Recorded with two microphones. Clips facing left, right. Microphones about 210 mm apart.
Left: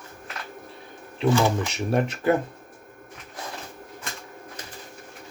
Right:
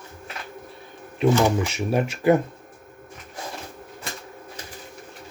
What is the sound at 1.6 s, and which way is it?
Speech, 5° right (ahead or behind).